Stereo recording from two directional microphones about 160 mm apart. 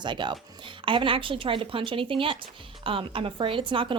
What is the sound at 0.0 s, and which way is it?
A woman's voice, 30° right (ahead or behind).